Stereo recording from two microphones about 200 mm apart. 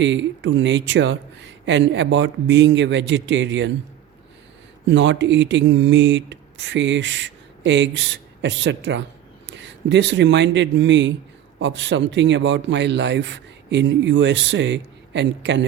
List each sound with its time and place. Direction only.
0.0 s speech: 65° right (ahead or behind)
4.9 s speech: 65° right (ahead or behind)